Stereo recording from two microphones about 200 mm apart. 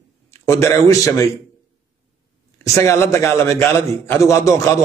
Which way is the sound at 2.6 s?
15° left (ahead or behind).